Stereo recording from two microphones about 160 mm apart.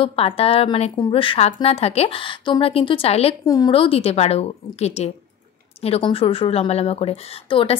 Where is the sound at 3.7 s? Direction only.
35° left (ahead or behind).